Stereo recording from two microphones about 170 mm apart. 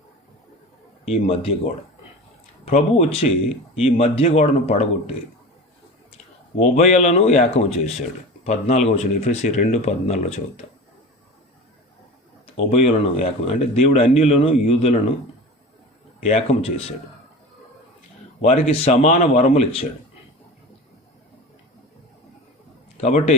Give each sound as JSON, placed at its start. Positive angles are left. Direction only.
{"t": 1.3, "sound": "speech", "side_deg": 35}
{"t": 6.6, "sound": "speech", "side_deg": 40}
{"t": 12.5, "sound": "speech", "side_deg": 40}
{"t": 16.2, "sound": "speech", "side_deg": 35}
{"t": 18.7, "sound": "speech", "side_deg": 40}
{"t": 23.0, "sound": "speech", "side_deg": 40}